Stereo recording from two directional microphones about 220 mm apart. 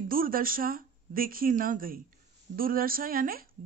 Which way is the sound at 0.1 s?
40° right (ahead or behind).